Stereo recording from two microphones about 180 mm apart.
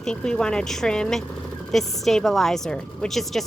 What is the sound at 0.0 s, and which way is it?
Speech, 5° left (ahead or behind).